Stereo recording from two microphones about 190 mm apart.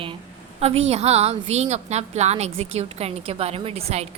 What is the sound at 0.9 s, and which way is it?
A woman's voice, 35° right (ahead or behind).